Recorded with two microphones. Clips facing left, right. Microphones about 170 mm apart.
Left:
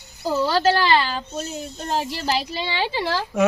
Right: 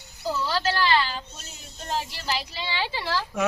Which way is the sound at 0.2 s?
45° left (ahead or behind).